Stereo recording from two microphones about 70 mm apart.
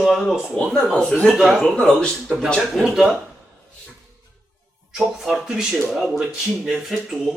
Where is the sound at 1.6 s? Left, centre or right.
Centre.